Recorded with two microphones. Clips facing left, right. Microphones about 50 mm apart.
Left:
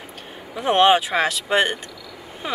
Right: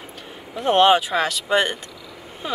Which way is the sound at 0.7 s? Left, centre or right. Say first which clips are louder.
Even; centre.